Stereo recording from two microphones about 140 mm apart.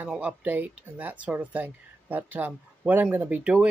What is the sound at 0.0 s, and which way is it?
Speech, 10° right (ahead or behind).